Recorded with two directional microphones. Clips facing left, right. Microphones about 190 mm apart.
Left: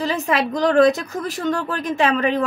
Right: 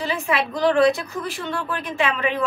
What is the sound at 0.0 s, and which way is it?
A woman's voice, 40° left (ahead or behind).